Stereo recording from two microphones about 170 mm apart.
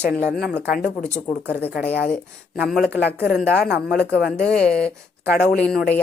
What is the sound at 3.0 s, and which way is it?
Speech, 80° left.